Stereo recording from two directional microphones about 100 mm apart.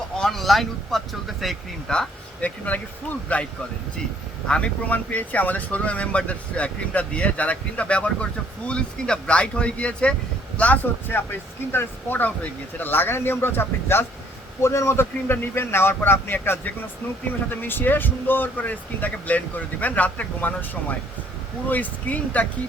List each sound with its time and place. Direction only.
0.2 s speech: centre (ahead or behind)
4.4 s speech: 10° left (ahead or behind)